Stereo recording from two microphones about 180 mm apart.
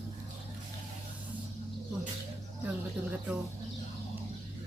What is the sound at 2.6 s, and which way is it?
Speech, 10° right (ahead or behind).